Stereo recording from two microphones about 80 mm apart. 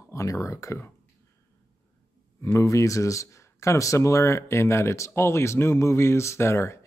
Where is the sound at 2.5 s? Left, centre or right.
Left.